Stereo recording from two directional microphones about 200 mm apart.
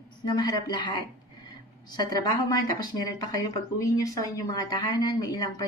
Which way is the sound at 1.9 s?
20° left (ahead or behind).